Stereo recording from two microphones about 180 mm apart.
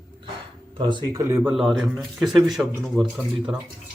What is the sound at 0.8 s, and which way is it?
Speech, 25° right (ahead or behind).